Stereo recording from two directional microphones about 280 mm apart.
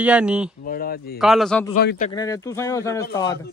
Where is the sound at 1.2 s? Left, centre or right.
Centre.